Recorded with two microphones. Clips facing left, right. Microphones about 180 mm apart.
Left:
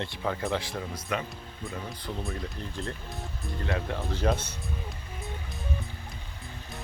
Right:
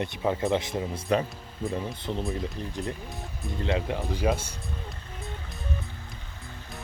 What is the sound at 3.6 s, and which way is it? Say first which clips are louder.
Speech: right 4 dB; 20° right (ahead or behind).